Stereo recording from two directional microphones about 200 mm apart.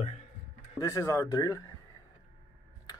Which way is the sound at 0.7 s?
15° left (ahead or behind).